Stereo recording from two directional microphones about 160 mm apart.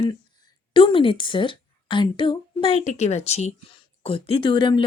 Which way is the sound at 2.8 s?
45° left (ahead or behind).